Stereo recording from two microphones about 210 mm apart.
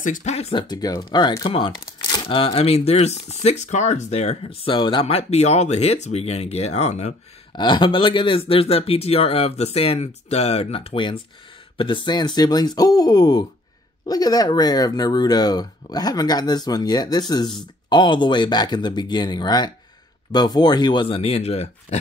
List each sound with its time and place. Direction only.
0.0 s speech: 35° left (ahead or behind)